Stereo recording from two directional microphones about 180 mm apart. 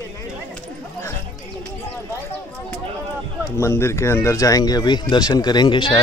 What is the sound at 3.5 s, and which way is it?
A man's voice, 15° left (ahead or behind).